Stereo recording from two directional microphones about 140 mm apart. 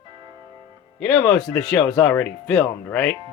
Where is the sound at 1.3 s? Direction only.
5° left (ahead or behind).